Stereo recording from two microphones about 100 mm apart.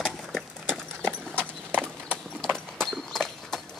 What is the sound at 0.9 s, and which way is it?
Clip-clop, 20° right (ahead or behind).